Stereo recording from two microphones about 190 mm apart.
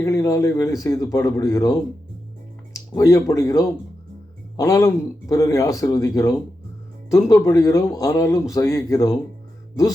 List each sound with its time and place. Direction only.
0.0 s speech: 15° left (ahead or behind)